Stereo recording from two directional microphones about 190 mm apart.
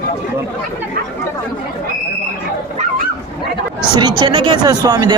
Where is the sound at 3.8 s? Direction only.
20° right (ahead or behind).